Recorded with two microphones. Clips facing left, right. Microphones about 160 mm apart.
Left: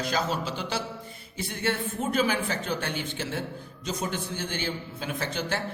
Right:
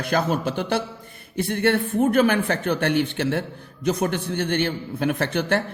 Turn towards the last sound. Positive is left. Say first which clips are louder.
# right 8 dB
turn(degrees=-60)  # may be behind; listen again after turning